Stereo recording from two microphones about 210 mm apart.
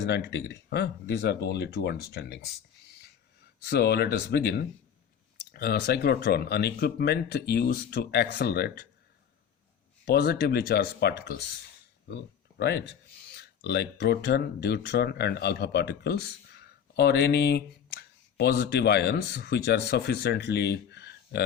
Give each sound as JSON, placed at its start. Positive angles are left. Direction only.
{"t": 0.0, "sound": "speech", "side_deg": 55}
{"t": 3.7, "sound": "speech", "side_deg": 50}
{"t": 10.1, "sound": "speech", "side_deg": 50}
{"t": 12.5, "sound": "speech", "side_deg": 50}